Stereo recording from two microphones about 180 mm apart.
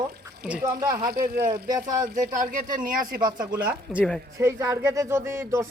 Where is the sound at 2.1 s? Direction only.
50° right (ahead or behind).